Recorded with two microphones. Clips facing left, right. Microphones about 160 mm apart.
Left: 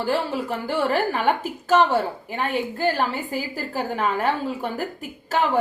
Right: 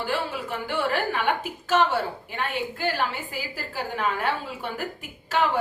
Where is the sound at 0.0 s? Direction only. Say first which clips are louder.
Left 5 dB; 35° left (ahead or behind).